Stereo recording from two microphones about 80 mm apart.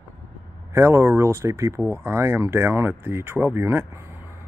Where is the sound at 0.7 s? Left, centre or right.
Right.